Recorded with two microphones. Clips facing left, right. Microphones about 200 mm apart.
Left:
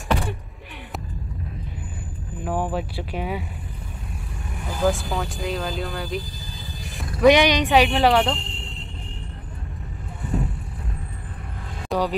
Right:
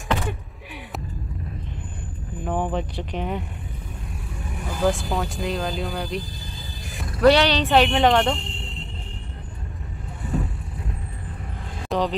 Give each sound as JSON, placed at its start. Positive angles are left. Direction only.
{"t": 2.4, "sound": "speech", "side_deg": 5}
{"t": 4.5, "sound": "speech", "side_deg": 0}
{"t": 6.8, "sound": "a sound", "side_deg": 0}
{"t": 7.2, "sound": "speech", "side_deg": 15}
{"t": 7.8, "sound": "speech", "side_deg": 0}
{"t": 10.2, "sound": "vehicle", "side_deg": 0}
{"t": 11.9, "sound": "speech", "side_deg": 0}